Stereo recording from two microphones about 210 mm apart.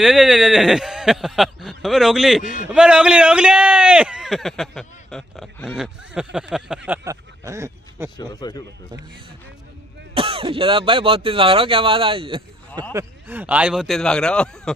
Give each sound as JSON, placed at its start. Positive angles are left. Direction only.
{"t": 0.0, "sound": "a man's voice", "side_deg": 0}
{"t": 6.9, "sound": "speech", "side_deg": -15}
{"t": 8.2, "sound": "speech", "side_deg": 20}
{"t": 10.1, "sound": "speech", "side_deg": -25}
{"t": 12.9, "sound": "a man's voice", "side_deg": -10}